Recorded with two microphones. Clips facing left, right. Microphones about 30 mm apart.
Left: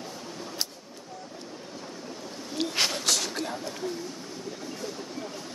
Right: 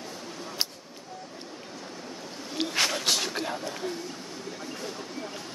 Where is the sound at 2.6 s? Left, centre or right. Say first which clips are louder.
Even; centre.